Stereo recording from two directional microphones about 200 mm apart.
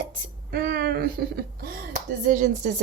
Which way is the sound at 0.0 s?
45° right (ahead or behind).